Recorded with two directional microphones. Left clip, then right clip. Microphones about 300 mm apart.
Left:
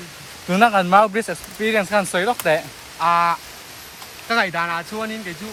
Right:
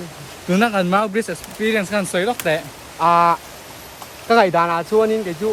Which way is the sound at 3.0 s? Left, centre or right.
Centre.